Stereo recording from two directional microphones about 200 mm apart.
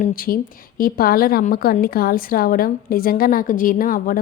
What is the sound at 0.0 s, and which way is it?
Speech, 45° left (ahead or behind).